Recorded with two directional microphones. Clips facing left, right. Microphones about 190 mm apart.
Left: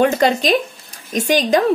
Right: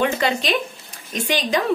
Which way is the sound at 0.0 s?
40° left (ahead or behind).